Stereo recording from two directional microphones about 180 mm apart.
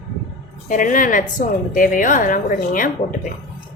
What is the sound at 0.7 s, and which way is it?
A woman's voice, 50° left (ahead or behind).